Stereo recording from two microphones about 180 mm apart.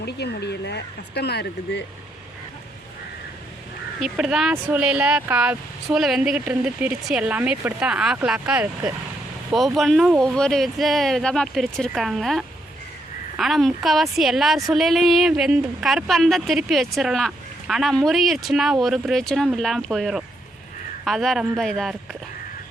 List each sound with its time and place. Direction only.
0.0 s speech: 65° left (ahead or behind)
4.0 s a woman's voice: 5° right (ahead or behind)